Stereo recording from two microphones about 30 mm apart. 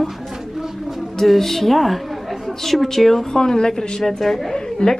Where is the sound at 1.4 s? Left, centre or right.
Centre.